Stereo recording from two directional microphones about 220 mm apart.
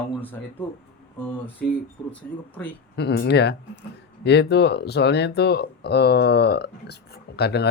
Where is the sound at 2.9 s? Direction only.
50° left (ahead or behind).